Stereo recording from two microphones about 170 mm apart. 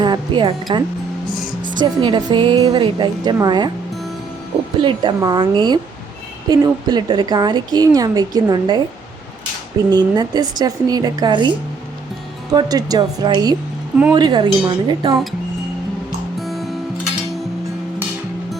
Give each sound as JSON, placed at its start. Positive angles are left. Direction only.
{"t": 0.0, "sound": "a woman's voice", "side_deg": -25}
{"t": 4.8, "sound": "a woman's voice", "side_deg": -30}
{"t": 9.9, "sound": "a woman's voice", "side_deg": -25}
{"t": 16.4, "sound": "music", "side_deg": 0}